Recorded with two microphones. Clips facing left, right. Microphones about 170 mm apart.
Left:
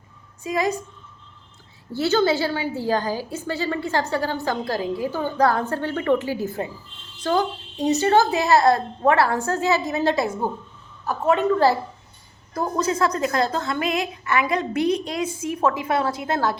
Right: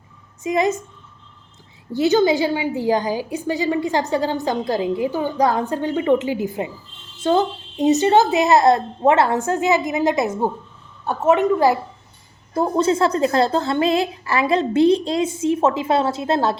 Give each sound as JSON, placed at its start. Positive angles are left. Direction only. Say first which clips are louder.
{"t": 0.4, "sound": "a woman's voice", "louder": "right 4 dB", "side_deg": -25}
{"t": 1.9, "sound": "a woman's voice", "louder": "right 4 dB", "side_deg": -15}
{"t": 12.5, "sound": "a woman's voice", "louder": "right 5 dB", "side_deg": -25}